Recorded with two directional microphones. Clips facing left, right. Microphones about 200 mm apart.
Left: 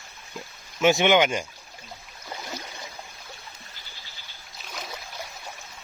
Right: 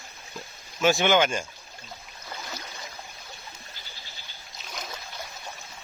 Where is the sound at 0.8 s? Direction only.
20° left (ahead or behind).